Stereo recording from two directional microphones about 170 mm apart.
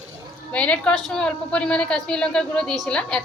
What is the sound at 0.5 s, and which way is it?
A woman's voice, 5° left (ahead or behind).